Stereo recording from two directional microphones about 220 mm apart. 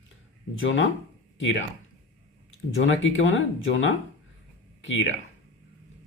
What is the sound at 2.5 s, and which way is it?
Speech, 60° left (ahead or behind).